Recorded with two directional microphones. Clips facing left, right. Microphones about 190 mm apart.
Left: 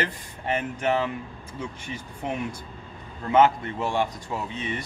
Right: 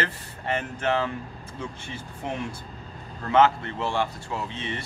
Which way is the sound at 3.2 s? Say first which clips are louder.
Left 1 dB; 15° left (ahead or behind).